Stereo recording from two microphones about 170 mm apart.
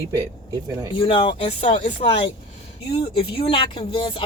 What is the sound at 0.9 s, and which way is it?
Speech, 30° left (ahead or behind).